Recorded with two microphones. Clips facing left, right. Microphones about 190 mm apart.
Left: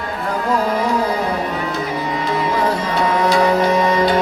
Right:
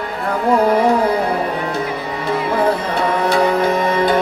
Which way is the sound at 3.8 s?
55° right (ahead or behind).